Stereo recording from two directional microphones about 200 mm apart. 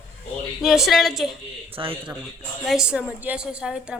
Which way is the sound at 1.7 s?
25° right (ahead or behind).